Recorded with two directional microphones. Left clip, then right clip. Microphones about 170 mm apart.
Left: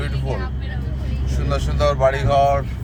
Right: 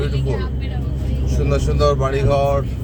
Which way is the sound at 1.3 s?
15° left (ahead or behind).